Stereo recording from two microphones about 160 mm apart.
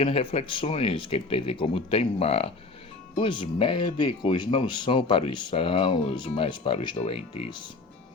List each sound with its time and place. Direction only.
0.0 s speech: 35° left (ahead or behind)